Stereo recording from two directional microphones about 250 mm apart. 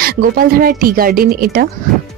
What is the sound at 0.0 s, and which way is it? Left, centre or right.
Speech, right.